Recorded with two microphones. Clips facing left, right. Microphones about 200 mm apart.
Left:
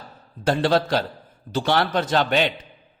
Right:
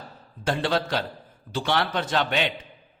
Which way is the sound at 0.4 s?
40° left (ahead or behind).